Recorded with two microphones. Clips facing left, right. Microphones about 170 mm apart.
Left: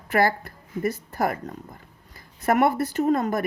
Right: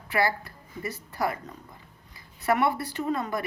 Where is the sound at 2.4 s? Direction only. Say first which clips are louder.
Left 4 dB; 45° left (ahead or behind).